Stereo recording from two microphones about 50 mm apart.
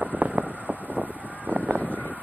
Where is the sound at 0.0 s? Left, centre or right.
Right.